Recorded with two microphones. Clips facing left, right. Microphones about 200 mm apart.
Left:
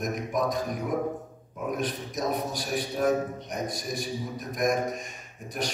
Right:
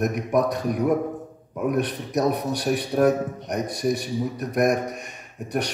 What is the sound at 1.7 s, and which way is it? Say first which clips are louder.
A man's voice: right 6 dB; 65° right (ahead or behind).